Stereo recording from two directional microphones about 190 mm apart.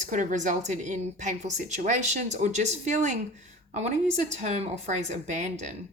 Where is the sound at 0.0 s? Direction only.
40° right (ahead or behind).